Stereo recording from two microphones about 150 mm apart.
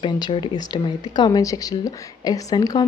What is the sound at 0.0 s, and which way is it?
Speech, 35° left (ahead or behind).